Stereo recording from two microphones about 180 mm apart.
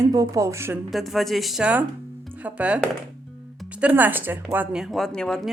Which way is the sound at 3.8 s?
10° right (ahead or behind).